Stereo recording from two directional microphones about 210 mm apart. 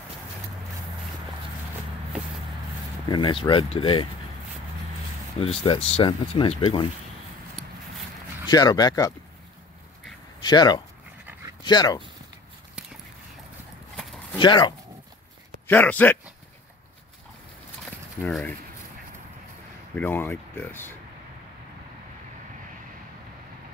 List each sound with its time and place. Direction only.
3.1 s speech: 20° left (ahead or behind)
5.4 s speech: 25° left (ahead or behind)
8.5 s speech: 20° left (ahead or behind)
10.4 s speech: 20° left (ahead or behind)
14.4 s speech: 20° left (ahead or behind)
15.6 s a man's voice: 10° left (ahead or behind)
18.2 s speech: 10° left (ahead or behind)
20.0 s speech: 10° left (ahead or behind)